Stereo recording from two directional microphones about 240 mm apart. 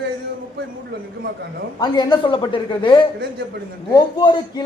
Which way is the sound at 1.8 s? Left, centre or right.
Centre.